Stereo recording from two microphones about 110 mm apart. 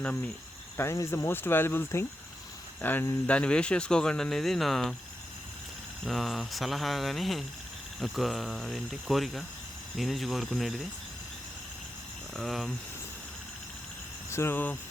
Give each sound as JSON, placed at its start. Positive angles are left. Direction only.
{"t": 0.8, "sound": "speech", "side_deg": 25}
{"t": 6.1, "sound": "speech", "side_deg": 0}
{"t": 12.4, "sound": "speech", "side_deg": 0}
{"t": 14.3, "sound": "speech", "side_deg": 25}